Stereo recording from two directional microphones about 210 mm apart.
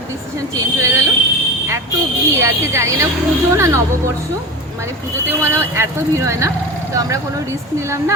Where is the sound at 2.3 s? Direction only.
15° right (ahead or behind).